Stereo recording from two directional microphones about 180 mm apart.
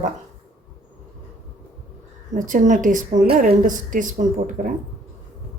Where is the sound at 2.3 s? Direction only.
45° right (ahead or behind).